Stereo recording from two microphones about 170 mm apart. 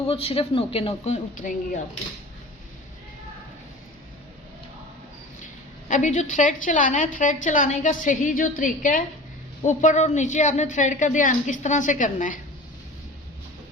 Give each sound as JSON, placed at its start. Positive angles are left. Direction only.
{"t": 0.1, "sound": "speech", "side_deg": 35}
{"t": 5.9, "sound": "a woman's voice", "side_deg": 45}